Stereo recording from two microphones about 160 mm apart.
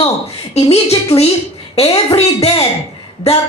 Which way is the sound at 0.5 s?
40° left (ahead or behind).